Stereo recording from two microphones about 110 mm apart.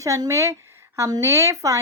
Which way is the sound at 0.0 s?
30° right (ahead or behind).